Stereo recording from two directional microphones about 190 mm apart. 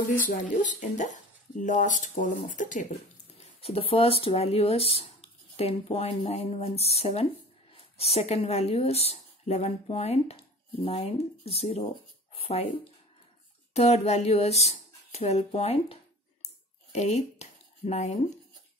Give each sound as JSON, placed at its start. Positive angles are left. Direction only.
{"t": 0.3, "sound": "speech", "side_deg": 40}